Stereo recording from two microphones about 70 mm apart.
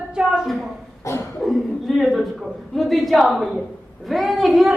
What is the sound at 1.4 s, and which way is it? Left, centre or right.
A woman's voice, centre.